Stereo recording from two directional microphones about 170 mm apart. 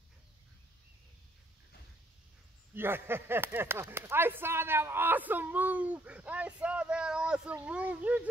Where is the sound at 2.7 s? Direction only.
15° right (ahead or behind).